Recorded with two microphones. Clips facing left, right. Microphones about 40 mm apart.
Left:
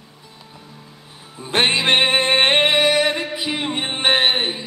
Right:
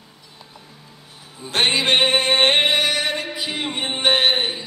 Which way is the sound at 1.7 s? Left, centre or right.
Left.